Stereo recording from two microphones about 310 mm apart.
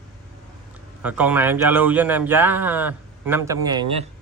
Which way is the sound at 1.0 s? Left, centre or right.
Centre.